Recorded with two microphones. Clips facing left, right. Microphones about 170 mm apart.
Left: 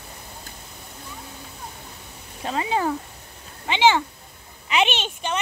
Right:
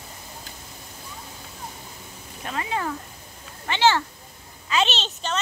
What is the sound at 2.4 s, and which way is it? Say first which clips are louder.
Speech: left 5 dB; 30° left (ahead or behind).